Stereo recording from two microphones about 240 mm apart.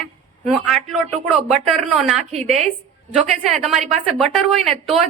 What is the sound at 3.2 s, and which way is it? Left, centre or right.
A woman's voice, centre.